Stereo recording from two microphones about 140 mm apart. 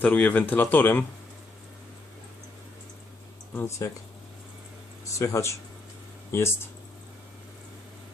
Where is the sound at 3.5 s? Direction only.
15° left (ahead or behind).